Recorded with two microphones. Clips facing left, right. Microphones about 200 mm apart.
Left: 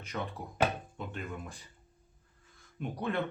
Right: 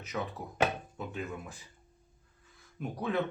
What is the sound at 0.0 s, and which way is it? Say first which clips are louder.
Speech: right 1 dB; 5° right (ahead or behind).